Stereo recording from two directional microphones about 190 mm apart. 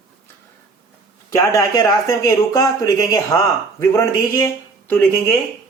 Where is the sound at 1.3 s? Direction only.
20° left (ahead or behind).